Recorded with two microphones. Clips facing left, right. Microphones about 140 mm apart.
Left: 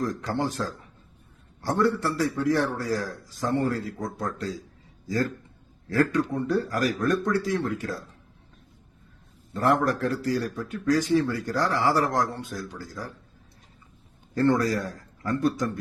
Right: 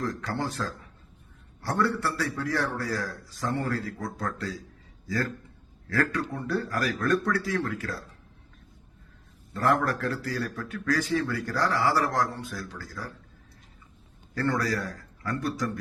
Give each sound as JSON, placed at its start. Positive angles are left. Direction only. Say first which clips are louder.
{"t": 0.1, "sound": "a man's voice", "louder": "left 3 dB", "side_deg": 20}
{"t": 5.9, "sound": "a man's voice", "louder": "left 5 dB", "side_deg": 20}
{"t": 9.5, "sound": "a man's voice", "louder": "left 2 dB", "side_deg": 20}
{"t": 14.3, "sound": "a man's voice", "louder": "left 5 dB", "side_deg": 20}